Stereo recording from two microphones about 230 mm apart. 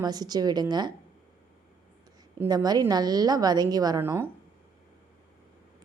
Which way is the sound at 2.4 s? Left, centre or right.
Centre.